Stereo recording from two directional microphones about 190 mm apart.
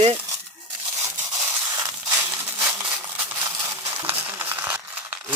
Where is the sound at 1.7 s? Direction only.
15° right (ahead or behind).